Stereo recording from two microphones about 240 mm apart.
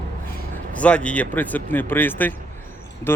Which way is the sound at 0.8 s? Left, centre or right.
Centre.